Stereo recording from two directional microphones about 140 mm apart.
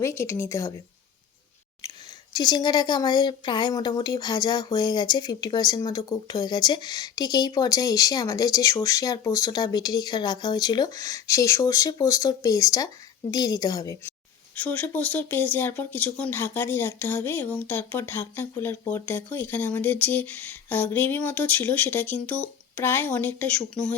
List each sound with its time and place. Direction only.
0.0 s speech: 20° left (ahead or behind)
2.3 s speech: 30° left (ahead or behind)
14.5 s speech: 10° left (ahead or behind)